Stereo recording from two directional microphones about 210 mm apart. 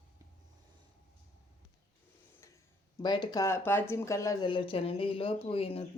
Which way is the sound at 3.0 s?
20° left (ahead or behind).